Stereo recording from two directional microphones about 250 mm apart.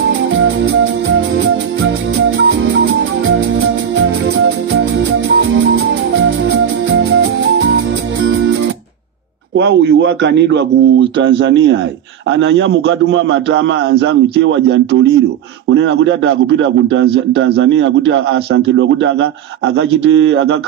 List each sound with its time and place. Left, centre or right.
1.0 s music: right
3.9 s music: right
9.6 s a man's voice: right